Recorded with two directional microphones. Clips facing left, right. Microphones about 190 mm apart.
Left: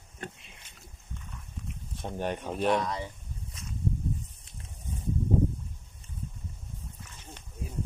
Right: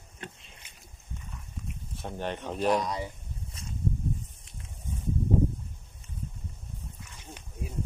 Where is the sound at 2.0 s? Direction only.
10° left (ahead or behind).